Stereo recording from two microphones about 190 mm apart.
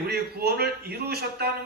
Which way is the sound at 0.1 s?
55° right (ahead or behind).